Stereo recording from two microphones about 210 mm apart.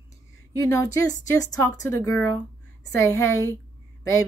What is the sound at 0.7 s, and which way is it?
Speech, 15° left (ahead or behind).